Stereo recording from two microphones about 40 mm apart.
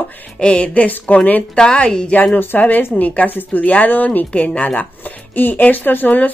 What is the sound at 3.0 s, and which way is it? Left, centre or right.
A woman's voice, left.